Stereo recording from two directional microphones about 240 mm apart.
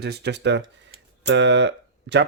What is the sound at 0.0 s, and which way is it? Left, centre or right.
Speech, right.